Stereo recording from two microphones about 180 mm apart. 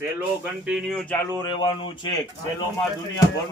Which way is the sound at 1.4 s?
25° left (ahead or behind).